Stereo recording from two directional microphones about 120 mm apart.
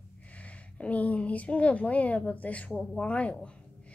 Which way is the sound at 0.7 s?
10° left (ahead or behind).